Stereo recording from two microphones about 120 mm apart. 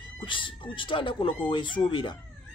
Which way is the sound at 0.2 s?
45° left (ahead or behind).